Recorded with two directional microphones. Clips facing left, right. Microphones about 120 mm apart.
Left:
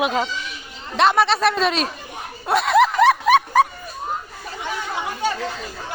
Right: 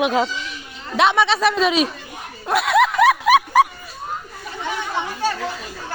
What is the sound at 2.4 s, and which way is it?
Snicker, centre (ahead or behind).